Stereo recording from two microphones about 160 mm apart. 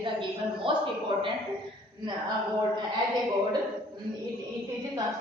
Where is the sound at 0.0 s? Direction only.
30° right (ahead or behind).